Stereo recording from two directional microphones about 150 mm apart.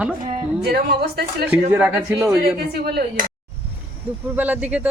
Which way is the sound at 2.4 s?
90° right.